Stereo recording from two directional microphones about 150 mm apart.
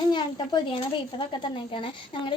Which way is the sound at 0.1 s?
30° left (ahead or behind).